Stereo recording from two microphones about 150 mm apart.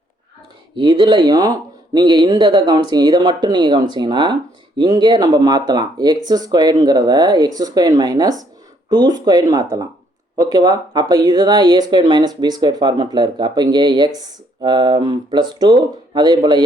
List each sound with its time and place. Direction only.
0.8 s speech: 30° right (ahead or behind)